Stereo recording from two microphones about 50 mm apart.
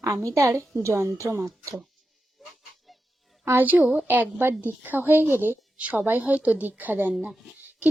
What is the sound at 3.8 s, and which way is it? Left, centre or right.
Speech, centre.